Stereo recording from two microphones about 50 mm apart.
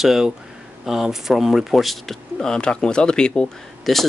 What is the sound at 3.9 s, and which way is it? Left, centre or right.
Speech, centre.